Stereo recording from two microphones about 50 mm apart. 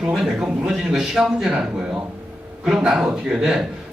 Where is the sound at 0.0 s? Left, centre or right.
Centre.